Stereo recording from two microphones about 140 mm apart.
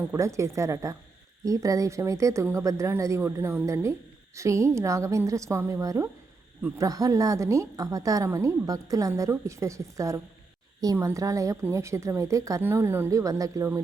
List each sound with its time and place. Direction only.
0.0 s a woman's voice: 20° right (ahead or behind)